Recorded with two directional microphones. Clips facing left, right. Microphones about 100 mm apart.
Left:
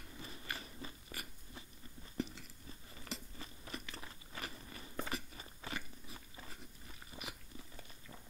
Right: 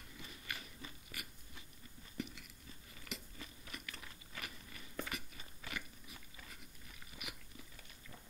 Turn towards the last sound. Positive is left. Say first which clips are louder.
# left 3 dB
turn(degrees=30)  # may be behind; listen again after turning